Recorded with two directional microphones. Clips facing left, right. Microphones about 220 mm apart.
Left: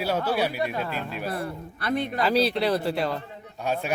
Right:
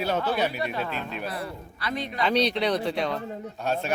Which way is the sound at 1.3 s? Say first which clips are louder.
Left 3 dB; 50° left (ahead or behind).